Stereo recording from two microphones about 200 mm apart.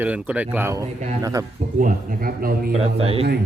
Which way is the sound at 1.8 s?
45° right (ahead or behind).